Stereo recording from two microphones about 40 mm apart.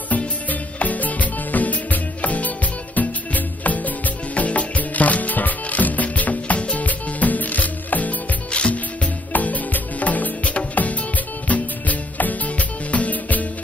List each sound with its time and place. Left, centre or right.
0.1 s music: left
8.5 s music: left
9.3 s music: left